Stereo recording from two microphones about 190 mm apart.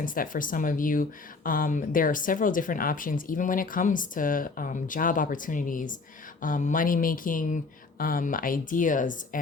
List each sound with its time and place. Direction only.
0.0 s speech: 45° left (ahead or behind)